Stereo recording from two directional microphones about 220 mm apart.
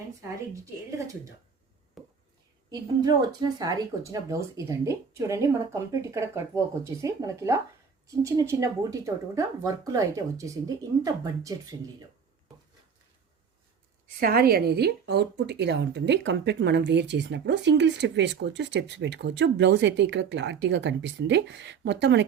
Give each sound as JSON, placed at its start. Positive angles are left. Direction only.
{"t": 0.2, "sound": "speech", "side_deg": -15}
{"t": 2.0, "sound": "a sound", "side_deg": 0}
{"t": 2.6, "sound": "speech", "side_deg": -20}
{"t": 14.2, "sound": "speech", "side_deg": -40}